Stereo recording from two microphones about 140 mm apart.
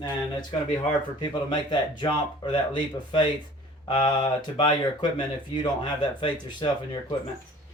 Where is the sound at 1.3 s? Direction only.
30° left (ahead or behind).